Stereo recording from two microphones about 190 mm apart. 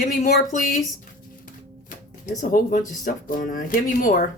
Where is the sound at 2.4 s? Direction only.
45° left (ahead or behind).